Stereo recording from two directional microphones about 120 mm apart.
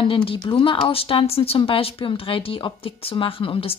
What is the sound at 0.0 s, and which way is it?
Speech, 45° left (ahead or behind).